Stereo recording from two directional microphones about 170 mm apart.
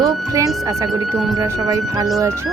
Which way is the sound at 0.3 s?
20° right (ahead or behind).